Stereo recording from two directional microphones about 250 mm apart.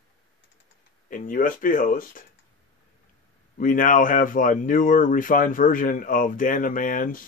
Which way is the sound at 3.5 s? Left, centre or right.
Left.